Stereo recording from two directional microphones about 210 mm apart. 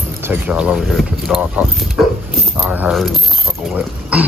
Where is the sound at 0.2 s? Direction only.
5° right (ahead or behind).